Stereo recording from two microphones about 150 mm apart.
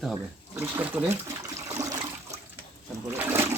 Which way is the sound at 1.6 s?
25° right (ahead or behind).